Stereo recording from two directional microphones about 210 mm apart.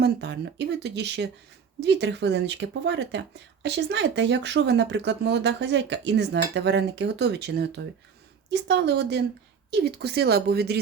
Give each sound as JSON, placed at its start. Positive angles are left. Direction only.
{"t": 0.0, "sound": "speech", "side_deg": -55}